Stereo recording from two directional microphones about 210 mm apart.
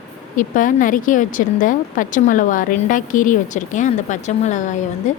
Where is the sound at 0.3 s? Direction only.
40° left (ahead or behind).